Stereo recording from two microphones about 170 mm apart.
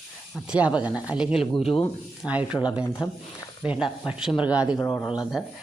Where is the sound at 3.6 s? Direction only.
5° right (ahead or behind).